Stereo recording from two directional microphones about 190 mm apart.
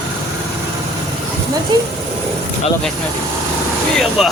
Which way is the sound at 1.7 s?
20° right (ahead or behind).